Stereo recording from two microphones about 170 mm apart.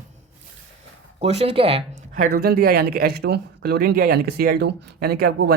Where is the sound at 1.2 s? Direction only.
40° right (ahead or behind).